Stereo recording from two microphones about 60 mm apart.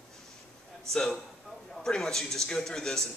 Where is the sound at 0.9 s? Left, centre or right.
Centre.